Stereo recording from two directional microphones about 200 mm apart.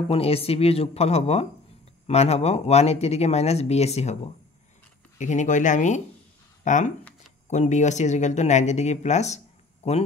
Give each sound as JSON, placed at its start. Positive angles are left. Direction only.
{"t": 0.1, "sound": "speech", "side_deg": 30}